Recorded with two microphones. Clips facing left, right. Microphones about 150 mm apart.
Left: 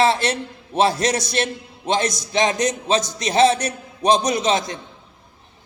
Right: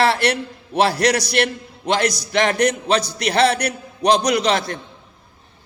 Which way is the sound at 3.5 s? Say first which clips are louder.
Even; 65° right (ahead or behind).